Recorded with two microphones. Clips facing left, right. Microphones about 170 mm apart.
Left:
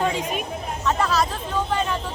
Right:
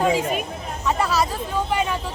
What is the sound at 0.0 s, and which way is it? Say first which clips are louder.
Speech: right 4 dB; 5° right (ahead or behind).